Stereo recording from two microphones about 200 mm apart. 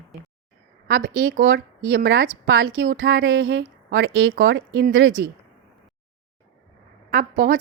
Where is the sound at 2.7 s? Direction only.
80° right.